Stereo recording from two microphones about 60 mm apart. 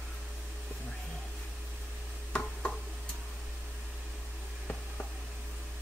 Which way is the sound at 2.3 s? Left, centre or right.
Centre.